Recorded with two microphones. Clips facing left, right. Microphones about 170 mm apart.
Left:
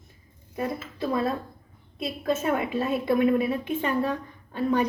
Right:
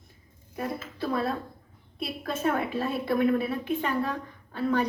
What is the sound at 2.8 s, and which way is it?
A woman's voice, 20° left (ahead or behind).